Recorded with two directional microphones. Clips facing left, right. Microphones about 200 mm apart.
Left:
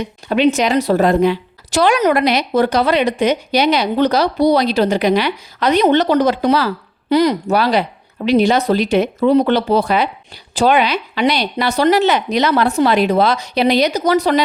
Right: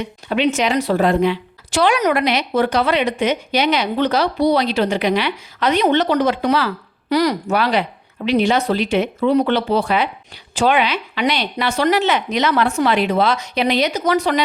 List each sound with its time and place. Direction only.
0.0 s a woman's voice: 40° left (ahead or behind)
7.1 s speech: 20° left (ahead or behind)
7.4 s a woman's voice: 35° left (ahead or behind)